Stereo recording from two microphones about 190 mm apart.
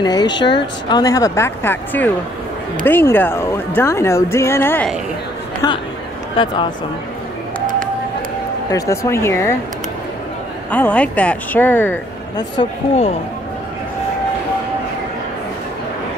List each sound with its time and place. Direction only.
0.0 s a woman's voice: 20° left (ahead or behind)
6.3 s speech: 25° left (ahead or behind)
8.6 s a woman's voice: 15° left (ahead or behind)
10.7 s a woman's voice: 10° left (ahead or behind)
12.4 s speech: 30° left (ahead or behind)